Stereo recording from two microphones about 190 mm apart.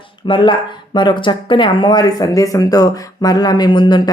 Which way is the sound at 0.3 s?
25° left (ahead or behind).